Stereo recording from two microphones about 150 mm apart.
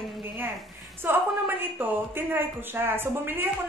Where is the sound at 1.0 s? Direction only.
15° right (ahead or behind).